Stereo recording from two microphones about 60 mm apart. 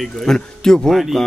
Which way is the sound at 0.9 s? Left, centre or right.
Centre.